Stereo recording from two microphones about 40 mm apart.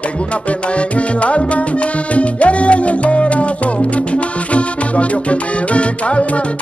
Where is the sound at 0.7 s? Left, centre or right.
Left.